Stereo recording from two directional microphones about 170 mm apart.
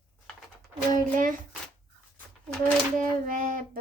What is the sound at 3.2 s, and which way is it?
Speech, 55° right (ahead or behind).